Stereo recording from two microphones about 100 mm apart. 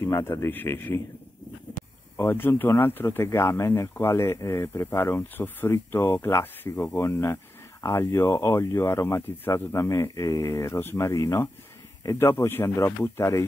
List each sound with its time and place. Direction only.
0.0 s speech: 25° left (ahead or behind)
2.1 s speech: 20° left (ahead or behind)